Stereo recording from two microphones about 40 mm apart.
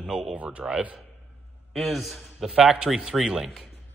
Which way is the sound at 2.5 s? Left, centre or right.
Right.